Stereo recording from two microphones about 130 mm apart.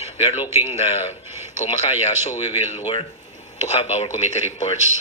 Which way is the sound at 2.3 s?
40° left (ahead or behind).